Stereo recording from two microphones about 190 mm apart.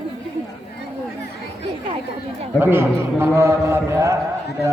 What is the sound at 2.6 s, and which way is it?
A man's voice, 10° right (ahead or behind).